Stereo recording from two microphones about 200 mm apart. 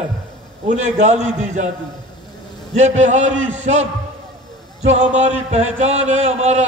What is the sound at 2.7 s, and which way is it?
A man's voice, 35° right (ahead or behind).